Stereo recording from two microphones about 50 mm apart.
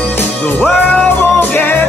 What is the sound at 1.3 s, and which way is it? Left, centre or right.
Music, left.